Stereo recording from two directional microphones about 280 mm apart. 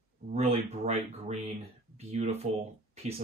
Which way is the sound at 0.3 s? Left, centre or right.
Right.